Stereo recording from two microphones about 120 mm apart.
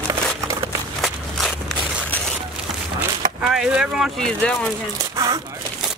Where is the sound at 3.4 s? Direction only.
5° right (ahead or behind).